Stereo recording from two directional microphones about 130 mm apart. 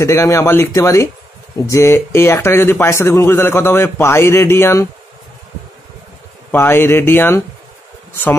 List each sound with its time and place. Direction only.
0.0 s speech: 25° left (ahead or behind)
6.5 s speech: 15° left (ahead or behind)